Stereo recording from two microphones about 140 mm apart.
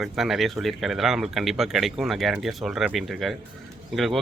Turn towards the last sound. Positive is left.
turn(degrees=0)  # may be behind; listen again after turning